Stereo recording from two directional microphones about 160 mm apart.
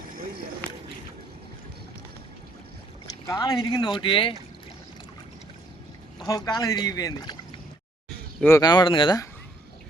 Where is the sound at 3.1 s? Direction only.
20° left (ahead or behind).